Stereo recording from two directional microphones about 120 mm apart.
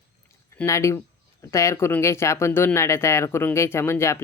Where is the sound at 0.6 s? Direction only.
25° left (ahead or behind).